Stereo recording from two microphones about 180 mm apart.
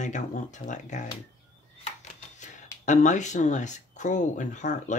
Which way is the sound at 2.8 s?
40° left (ahead or behind).